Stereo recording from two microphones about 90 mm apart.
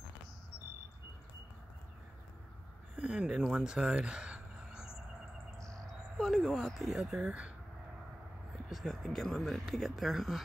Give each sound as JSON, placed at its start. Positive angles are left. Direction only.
{"t": 3.0, "sound": "speech", "side_deg": -10}
{"t": 6.1, "sound": "speech", "side_deg": 0}
{"t": 8.6, "sound": "speech", "side_deg": 0}